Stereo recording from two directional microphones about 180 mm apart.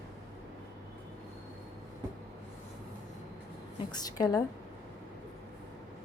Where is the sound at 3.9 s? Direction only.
20° left (ahead or behind).